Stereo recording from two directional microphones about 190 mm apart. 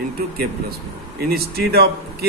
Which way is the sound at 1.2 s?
55° right (ahead or behind).